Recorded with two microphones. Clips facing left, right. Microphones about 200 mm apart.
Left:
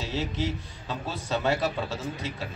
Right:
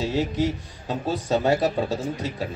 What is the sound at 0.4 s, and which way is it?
A man's voice, 40° right (ahead or behind).